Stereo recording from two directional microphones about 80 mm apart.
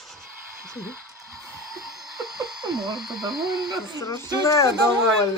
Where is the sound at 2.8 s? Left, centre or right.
Right.